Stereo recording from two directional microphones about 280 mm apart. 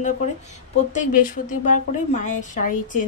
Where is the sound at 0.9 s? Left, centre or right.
Left.